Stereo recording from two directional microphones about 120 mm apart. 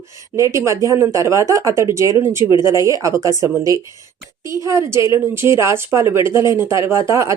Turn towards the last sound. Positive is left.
turn(degrees=-25)  # may be behind; listen again after turning